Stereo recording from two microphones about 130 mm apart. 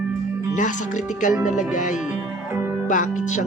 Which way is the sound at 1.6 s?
80° left.